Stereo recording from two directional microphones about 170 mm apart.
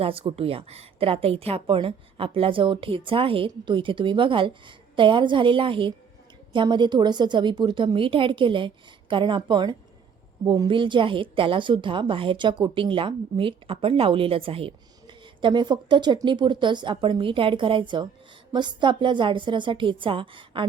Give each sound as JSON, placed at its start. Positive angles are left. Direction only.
{"t": 0.0, "sound": "a woman's voice", "side_deg": -30}